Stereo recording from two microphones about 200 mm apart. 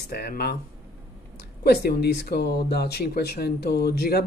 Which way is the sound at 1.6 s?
50° left (ahead or behind).